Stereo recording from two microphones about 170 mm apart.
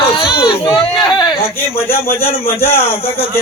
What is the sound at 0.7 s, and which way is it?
Speech, 30° left (ahead or behind).